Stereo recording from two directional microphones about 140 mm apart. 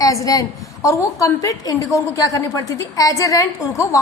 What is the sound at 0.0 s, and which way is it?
A woman's voice, 25° left (ahead or behind).